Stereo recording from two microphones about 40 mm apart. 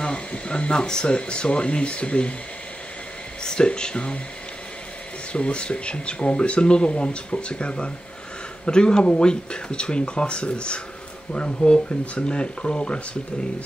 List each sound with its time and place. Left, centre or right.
0.0 s speech: left
3.4 s speech: left
5.3 s speech: left